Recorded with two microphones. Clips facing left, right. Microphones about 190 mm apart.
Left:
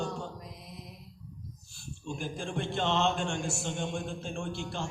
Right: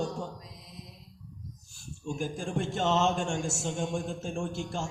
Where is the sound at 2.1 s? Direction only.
45° right (ahead or behind).